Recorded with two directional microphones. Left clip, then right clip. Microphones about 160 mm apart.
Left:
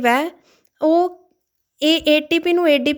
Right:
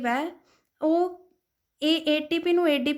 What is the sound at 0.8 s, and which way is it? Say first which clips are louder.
Speech: left 8 dB; 40° left (ahead or behind).